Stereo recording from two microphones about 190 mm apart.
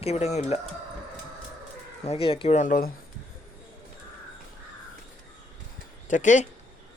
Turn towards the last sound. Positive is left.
turn(degrees=40)  # may be behind; listen again after turning